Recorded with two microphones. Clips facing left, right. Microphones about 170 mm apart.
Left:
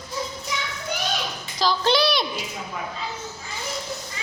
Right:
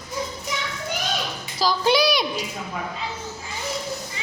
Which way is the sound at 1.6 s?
10° right (ahead or behind).